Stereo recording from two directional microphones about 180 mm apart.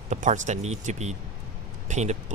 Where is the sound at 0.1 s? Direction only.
40° right (ahead or behind).